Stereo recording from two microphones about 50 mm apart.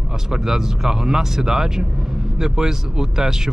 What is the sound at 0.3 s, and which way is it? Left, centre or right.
Speech, centre.